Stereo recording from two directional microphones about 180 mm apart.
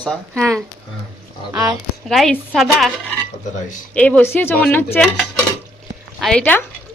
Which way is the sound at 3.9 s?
10° left (ahead or behind).